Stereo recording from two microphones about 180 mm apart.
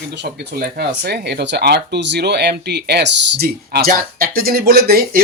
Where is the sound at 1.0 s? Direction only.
65° right (ahead or behind).